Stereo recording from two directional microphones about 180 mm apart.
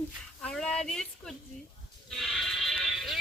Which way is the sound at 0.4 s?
5° left (ahead or behind).